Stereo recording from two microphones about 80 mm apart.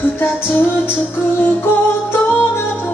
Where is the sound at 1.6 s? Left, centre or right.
Left.